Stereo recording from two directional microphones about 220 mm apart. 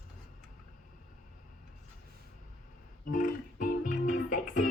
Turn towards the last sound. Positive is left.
turn(degrees=35)  # may be behind; listen again after turning